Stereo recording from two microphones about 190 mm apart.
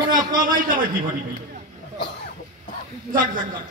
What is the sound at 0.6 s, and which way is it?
Speech, 45° right (ahead or behind).